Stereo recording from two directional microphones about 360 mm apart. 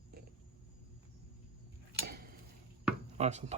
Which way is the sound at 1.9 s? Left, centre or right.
Right.